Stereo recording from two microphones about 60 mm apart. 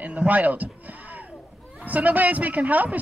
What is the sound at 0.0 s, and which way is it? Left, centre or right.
Speech, right.